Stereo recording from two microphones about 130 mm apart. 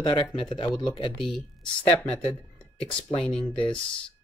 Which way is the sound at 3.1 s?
50° left (ahead or behind).